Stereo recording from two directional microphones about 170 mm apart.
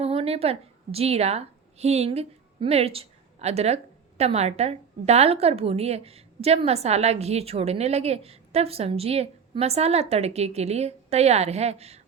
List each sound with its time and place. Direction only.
0.0 s a woman's voice: 35° right (ahead or behind)